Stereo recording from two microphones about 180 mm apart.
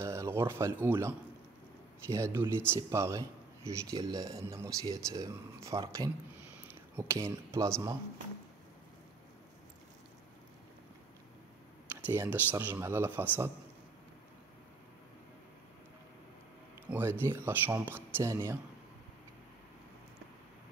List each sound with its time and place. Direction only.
0.0 s a man's voice: 15° right (ahead or behind)
12.1 s a man's voice: 10° right (ahead or behind)
16.9 s a man's voice: 10° right (ahead or behind)